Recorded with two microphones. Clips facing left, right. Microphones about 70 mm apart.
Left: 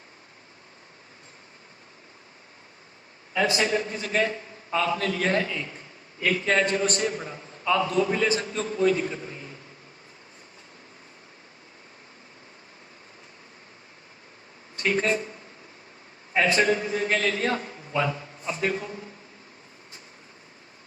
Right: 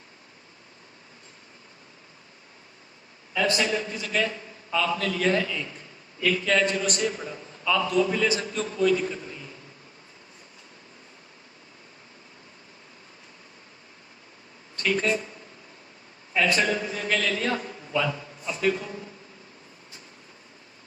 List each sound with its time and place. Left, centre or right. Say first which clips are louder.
3.5 s a man's voice: left 1 dB; left
14.8 s speech: left 1 dB; left
16.3 s a man's voice: left 2 dB; left